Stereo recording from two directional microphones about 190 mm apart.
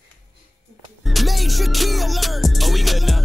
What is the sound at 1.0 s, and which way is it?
Music, centre (ahead or behind).